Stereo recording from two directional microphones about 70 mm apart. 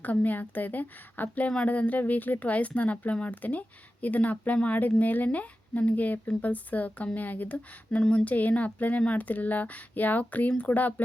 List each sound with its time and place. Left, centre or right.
0.0 s a woman's voice: left